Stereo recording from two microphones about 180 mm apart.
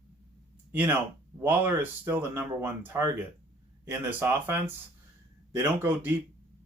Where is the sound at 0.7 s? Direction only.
10° right (ahead or behind).